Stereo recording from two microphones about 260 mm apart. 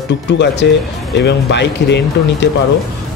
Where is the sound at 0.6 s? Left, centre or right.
Left.